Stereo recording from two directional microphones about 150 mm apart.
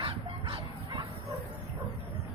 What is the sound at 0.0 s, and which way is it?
Bow-wow, 35° right (ahead or behind).